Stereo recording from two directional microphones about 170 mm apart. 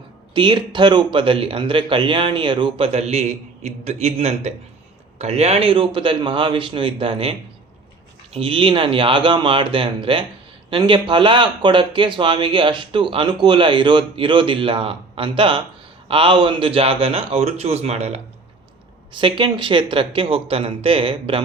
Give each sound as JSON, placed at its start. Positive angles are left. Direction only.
{"t": 0.3, "sound": "speech", "side_deg": -30}